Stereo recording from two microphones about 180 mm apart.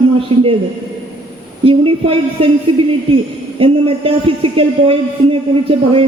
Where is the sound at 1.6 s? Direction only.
30° right (ahead or behind).